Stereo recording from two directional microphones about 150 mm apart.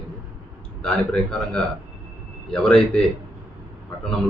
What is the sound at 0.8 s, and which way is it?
A man's voice, 5° left (ahead or behind).